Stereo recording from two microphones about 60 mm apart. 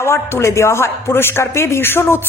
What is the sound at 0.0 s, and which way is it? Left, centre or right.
A man's voice, left.